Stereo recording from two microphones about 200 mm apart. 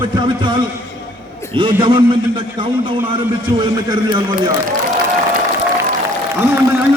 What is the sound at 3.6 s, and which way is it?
Speech, 20° right (ahead or behind).